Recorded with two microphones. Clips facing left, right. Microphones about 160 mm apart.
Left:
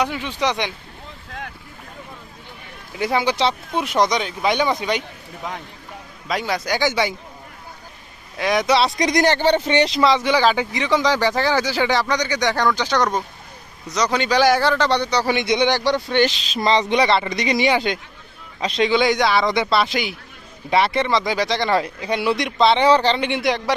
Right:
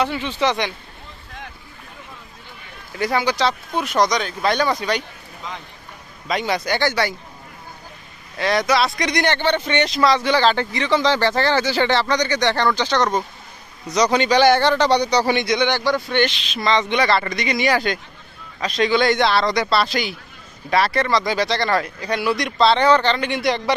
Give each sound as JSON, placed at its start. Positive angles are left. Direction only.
{"t": 0.0, "sound": "speech", "side_deg": 10}
{"t": 2.9, "sound": "speech", "side_deg": 10}
{"t": 3.2, "sound": "speech", "side_deg": 25}
{"t": 4.3, "sound": "speech", "side_deg": 15}
{"t": 6.2, "sound": "a man's voice", "side_deg": 5}
{"t": 6.9, "sound": "speech", "side_deg": 20}
{"t": 8.4, "sound": "speech", "side_deg": 15}
{"t": 8.6, "sound": "speech", "side_deg": 30}
{"t": 9.9, "sound": "a man's voice", "side_deg": 15}
{"t": 15.4, "sound": "speech", "side_deg": 30}
{"t": 17.6, "sound": "speech", "side_deg": 20}